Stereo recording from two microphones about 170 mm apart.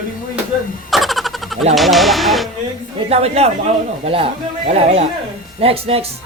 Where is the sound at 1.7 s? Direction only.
Centre (ahead or behind).